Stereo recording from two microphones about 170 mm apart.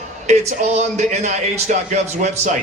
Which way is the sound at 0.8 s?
45° right (ahead or behind).